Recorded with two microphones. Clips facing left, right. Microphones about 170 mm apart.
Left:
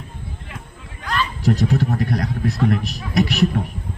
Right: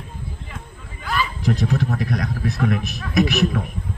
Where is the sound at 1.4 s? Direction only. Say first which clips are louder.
Left 4 dB; 35° left (ahead or behind).